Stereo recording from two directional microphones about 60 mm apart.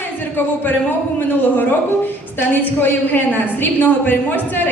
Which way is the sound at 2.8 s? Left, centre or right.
Left.